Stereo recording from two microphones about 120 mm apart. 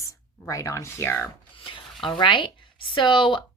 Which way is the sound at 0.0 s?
25° left (ahead or behind).